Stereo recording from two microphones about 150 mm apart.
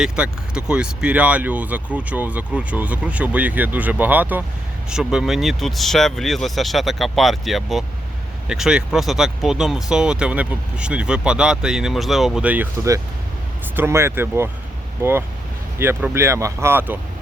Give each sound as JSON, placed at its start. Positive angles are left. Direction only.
{"t": 0.0, "sound": "speech", "side_deg": -5}
{"t": 12.7, "sound": "speech", "side_deg": -20}
{"t": 15.8, "sound": "speech", "side_deg": -15}